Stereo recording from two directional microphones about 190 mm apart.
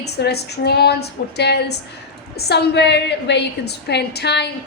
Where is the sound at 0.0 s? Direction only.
60° left (ahead or behind).